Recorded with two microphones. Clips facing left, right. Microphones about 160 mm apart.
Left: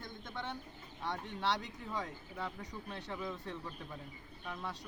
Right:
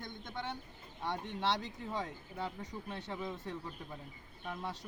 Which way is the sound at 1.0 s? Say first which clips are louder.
Right 1 dB; 20° right (ahead or behind).